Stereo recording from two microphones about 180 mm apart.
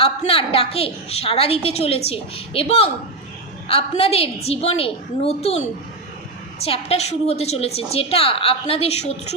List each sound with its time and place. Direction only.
0.0 s a woman's voice: 30° left (ahead or behind)